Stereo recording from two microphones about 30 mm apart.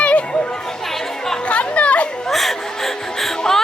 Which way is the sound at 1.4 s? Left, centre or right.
Left.